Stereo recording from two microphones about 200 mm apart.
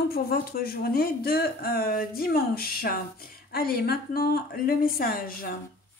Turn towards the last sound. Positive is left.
turn(degrees=45)  # may be behind; listen again after turning